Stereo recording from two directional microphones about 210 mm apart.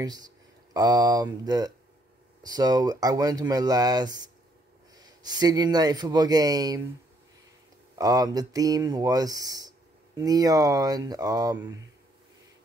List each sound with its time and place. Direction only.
0.7 s speech: 20° right (ahead or behind)
8.0 s speech: 15° right (ahead or behind)